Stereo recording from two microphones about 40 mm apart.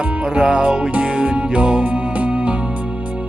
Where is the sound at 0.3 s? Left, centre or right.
Right.